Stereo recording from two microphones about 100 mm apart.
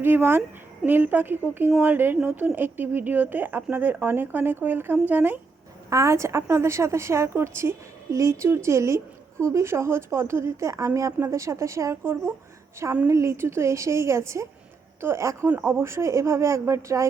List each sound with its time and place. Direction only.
0.0 s speech: 20° right (ahead or behind)
5.9 s speech: 30° right (ahead or behind)